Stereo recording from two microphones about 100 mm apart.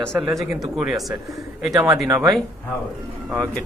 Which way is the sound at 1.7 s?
35° right (ahead or behind).